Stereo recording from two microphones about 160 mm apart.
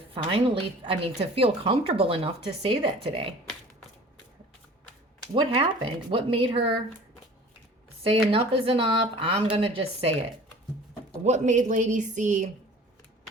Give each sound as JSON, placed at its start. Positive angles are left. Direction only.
{"t": 0.1, "sound": "a woman's voice", "side_deg": -35}
{"t": 5.3, "sound": "a woman's voice", "side_deg": -30}
{"t": 8.0, "sound": "a woman's voice", "side_deg": -35}
{"t": 11.2, "sound": "speech", "side_deg": -50}